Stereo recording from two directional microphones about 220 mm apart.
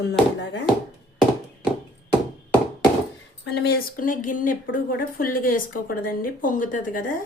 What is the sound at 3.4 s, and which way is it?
A woman's voice, 50° left (ahead or behind).